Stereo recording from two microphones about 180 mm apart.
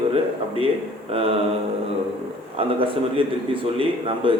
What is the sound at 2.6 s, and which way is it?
Speech, 30° right (ahead or behind).